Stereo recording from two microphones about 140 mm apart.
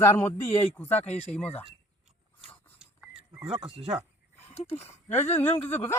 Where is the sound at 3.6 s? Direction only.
40° right (ahead or behind).